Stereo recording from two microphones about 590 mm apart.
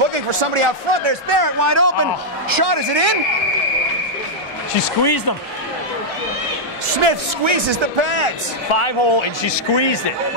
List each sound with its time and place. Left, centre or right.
0.0 s speech: right
1.6 s speech: right
2.5 s speech: right
5.0 s speech: left
6.9 s speech: right
8.7 s a man's voice: left